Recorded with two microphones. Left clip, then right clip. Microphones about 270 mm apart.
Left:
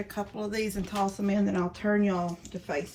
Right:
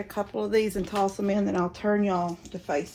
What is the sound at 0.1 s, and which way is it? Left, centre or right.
Speech, right.